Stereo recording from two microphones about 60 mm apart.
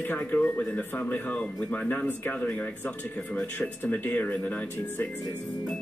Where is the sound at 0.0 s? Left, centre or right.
Left.